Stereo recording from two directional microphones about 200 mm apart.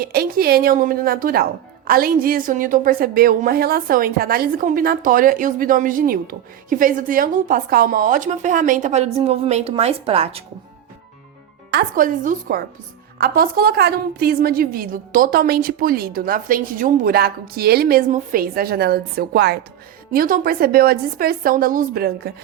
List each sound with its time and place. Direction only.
0.0 s a woman's voice: 50° right (ahead or behind); by 10.4 s 30° right (ahead or behind)
11.7 s a woman's voice: 50° right (ahead or behind)